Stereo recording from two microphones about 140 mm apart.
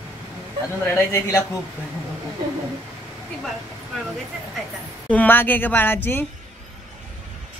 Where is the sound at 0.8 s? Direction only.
20° left (ahead or behind).